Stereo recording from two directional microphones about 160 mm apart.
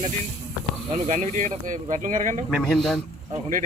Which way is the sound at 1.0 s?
50° right (ahead or behind).